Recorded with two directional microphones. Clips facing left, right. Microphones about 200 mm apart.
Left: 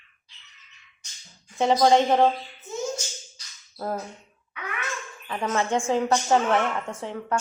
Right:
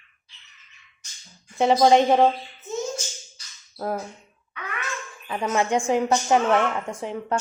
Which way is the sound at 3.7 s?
10° right (ahead or behind).